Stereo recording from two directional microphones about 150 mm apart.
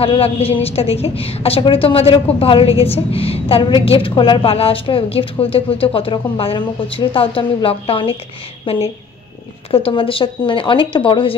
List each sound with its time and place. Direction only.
0.0 s a woman's voice: 40° left (ahead or behind)